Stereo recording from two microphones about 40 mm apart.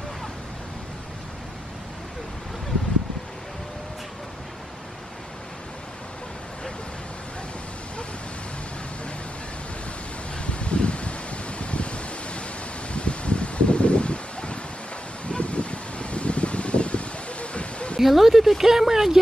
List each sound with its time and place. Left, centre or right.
10.4 s rustling leaves: left
18.0 s speech: centre